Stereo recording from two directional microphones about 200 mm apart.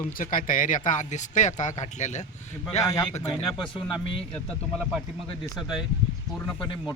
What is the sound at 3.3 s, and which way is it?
Speech, centre (ahead or behind).